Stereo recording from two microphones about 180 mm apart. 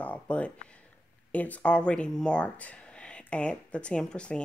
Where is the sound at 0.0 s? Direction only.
5° left (ahead or behind).